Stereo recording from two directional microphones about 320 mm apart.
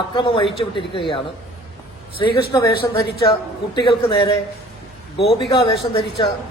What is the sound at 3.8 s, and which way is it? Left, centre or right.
Speech, centre.